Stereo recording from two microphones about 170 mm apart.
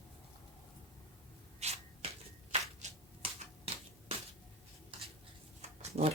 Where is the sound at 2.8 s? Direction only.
45° right (ahead or behind).